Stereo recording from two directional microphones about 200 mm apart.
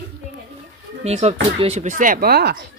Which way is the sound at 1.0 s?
35° right (ahead or behind).